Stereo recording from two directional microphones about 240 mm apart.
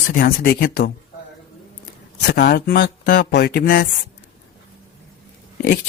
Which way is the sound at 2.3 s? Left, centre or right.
Left.